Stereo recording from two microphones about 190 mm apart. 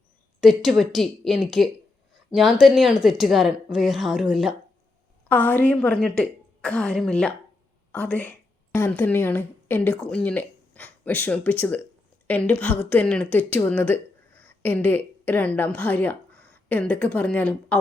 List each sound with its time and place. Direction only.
0.4 s a woman's voice: centre (ahead or behind)